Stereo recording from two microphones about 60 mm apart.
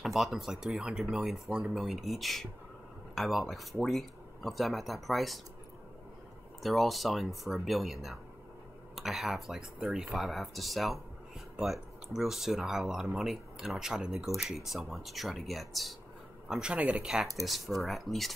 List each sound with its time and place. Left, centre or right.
0.0 s speech: centre
6.6 s speech: centre
16.4 s speech: centre
16.7 s speech: right
17.0 s speech: centre